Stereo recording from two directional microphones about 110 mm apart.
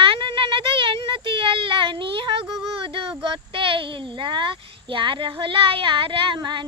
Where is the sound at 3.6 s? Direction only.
55° right (ahead or behind).